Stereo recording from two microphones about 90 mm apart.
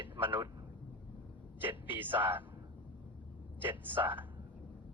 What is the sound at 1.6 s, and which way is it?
Speech, 20° right (ahead or behind).